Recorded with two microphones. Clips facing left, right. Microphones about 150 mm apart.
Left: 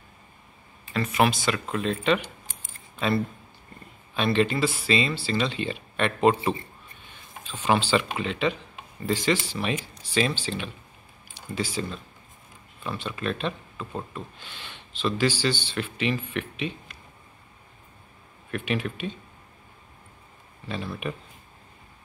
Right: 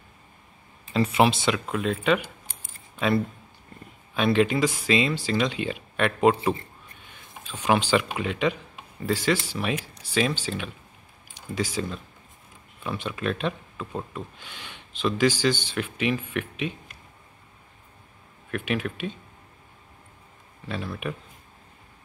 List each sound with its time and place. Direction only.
1.0 s speech: 25° right (ahead or behind)
1.7 s speech: 10° right (ahead or behind)
4.1 s speech: 10° right (ahead or behind)
18.5 s speech: 5° right (ahead or behind)
20.6 s speech: 5° right (ahead or behind)